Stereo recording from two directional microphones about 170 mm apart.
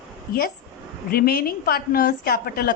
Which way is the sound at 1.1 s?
60° left (ahead or behind).